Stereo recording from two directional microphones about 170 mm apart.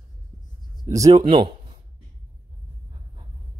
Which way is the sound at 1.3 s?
30° right (ahead or behind).